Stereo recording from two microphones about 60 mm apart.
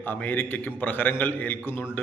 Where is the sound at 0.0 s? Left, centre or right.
Left.